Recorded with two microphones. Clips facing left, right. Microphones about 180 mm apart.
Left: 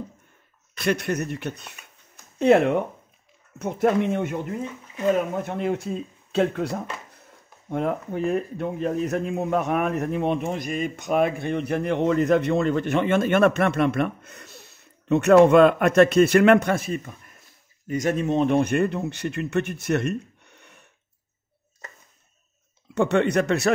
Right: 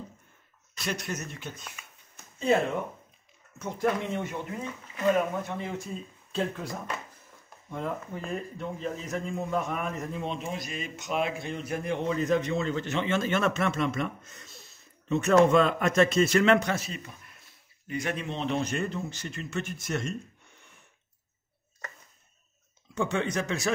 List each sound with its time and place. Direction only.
0.7 s a man's voice: 60° left (ahead or behind)
22.9 s a man's voice: 65° left (ahead or behind)